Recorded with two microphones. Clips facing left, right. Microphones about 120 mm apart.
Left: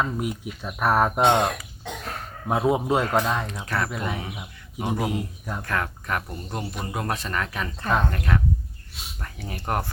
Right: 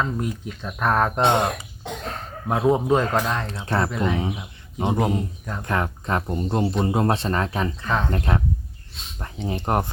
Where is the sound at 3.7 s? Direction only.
30° right (ahead or behind).